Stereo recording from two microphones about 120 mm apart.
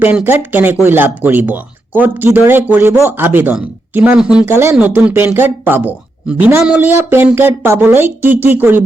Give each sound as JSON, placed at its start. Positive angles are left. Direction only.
{"t": 0.0, "sound": "speech", "side_deg": -15}
{"t": 4.4, "sound": "speech", "side_deg": -20}